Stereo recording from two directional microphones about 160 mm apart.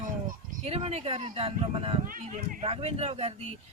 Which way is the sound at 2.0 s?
60° right (ahead or behind).